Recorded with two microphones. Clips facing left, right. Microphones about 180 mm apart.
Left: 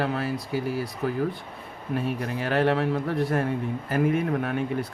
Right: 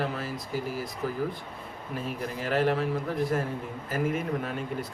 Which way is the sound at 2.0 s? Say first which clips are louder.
Left 4 dB; 65° left (ahead or behind).